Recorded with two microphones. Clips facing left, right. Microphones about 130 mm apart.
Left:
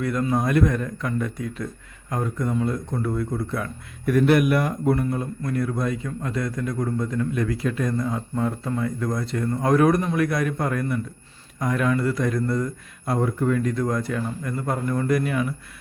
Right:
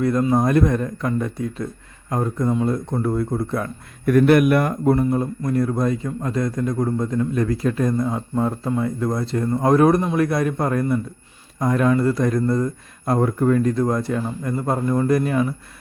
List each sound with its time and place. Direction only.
0.0 s a man's voice: 35° right (ahead or behind)
4.1 s speech: 50° right (ahead or behind)
5.5 s a man's voice: 40° right (ahead or behind)
13.1 s a man's voice: 45° right (ahead or behind)